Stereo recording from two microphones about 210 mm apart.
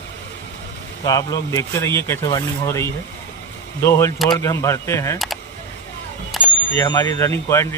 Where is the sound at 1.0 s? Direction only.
15° left (ahead or behind).